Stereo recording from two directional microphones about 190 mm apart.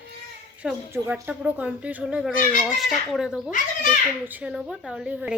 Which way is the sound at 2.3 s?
45° left (ahead or behind).